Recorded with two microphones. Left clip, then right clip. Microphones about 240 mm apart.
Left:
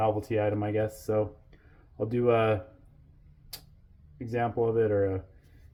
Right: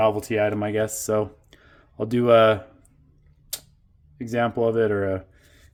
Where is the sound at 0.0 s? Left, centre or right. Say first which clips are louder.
Right 6 dB; right.